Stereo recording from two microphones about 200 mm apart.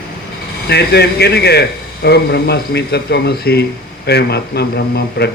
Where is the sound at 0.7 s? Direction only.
55° left (ahead or behind).